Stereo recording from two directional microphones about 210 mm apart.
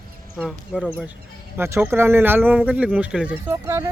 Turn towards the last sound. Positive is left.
turn(degrees=-10)  # may be behind; listen again after turning